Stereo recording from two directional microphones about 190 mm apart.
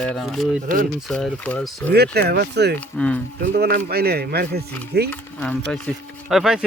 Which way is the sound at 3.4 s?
55° right (ahead or behind).